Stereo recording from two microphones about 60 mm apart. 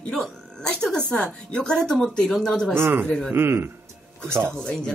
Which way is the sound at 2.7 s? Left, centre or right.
Right.